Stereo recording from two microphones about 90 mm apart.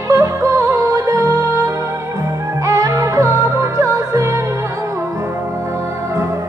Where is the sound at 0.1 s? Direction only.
35° right (ahead or behind).